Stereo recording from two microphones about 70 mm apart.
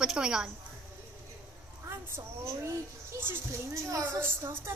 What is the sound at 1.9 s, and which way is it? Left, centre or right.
A woman's voice, right.